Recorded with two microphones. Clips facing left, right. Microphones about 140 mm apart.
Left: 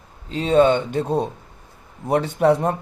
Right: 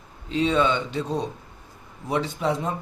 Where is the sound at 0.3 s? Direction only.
45° left (ahead or behind).